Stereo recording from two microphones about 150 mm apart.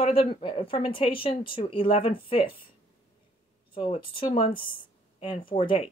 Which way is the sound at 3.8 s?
40° left (ahead or behind).